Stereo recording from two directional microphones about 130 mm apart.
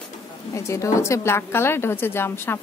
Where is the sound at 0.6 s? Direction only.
25° left (ahead or behind).